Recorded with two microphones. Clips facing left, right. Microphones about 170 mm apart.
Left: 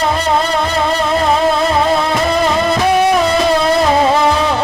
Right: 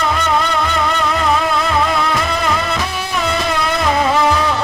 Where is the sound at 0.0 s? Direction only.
35° left (ahead or behind).